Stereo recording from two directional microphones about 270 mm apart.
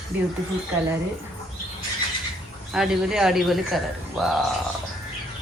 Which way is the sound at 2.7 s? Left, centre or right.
Centre.